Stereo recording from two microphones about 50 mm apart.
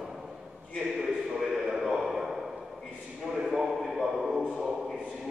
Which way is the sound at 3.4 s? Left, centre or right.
Centre.